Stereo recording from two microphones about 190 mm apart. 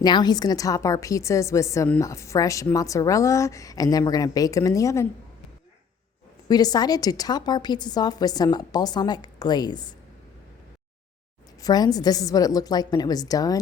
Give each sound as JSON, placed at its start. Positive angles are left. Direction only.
{"t": 0.0, "sound": "a woman's voice", "side_deg": 20}
{"t": 6.5, "sound": "a woman's voice", "side_deg": 20}
{"t": 11.6, "sound": "a woman's voice", "side_deg": 20}